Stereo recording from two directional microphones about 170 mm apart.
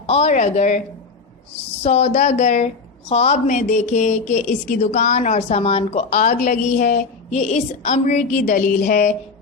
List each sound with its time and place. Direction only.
0.1 s a woman's voice: 40° left (ahead or behind)
1.8 s a woman's voice: 40° left (ahead or behind)